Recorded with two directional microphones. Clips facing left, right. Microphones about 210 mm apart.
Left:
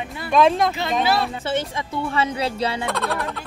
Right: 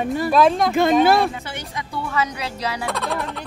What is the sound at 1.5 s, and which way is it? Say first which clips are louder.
A woman's voice: left 7 dB; 25° left (ahead or behind).